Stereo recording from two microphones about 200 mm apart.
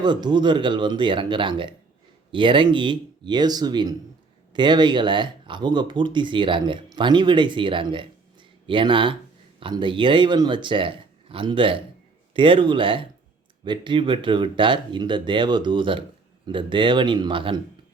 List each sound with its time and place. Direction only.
0.0 s speech: 20° right (ahead or behind)